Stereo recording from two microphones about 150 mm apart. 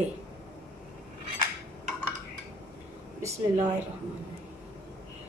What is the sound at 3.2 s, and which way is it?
Speech, 20° right (ahead or behind).